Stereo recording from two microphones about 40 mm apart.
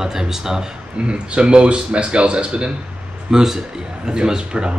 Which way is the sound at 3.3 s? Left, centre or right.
Centre.